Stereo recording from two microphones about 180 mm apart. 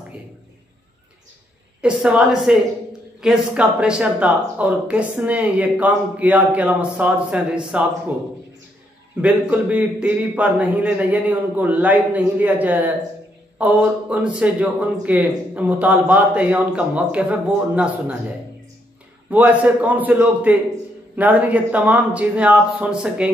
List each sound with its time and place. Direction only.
1.8 s a woman's voice: 5° right (ahead or behind)
9.2 s speech: 10° right (ahead or behind)
19.3 s speech: 10° right (ahead or behind)